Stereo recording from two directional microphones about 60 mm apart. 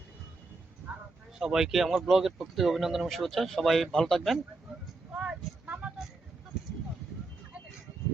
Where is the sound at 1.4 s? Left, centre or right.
Centre.